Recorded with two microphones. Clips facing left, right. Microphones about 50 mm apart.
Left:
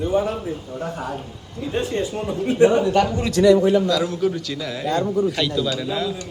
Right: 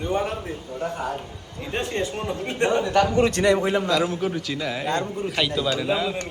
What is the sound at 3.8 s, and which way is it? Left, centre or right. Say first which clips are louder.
A man's voice: left 2 dB; right.